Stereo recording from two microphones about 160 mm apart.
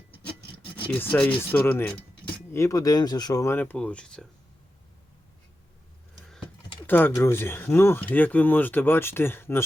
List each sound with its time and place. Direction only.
0.9 s speech: 10° left (ahead or behind)
2.5 s speech: 20° left (ahead or behind)
6.8 s speech: 10° left (ahead or behind)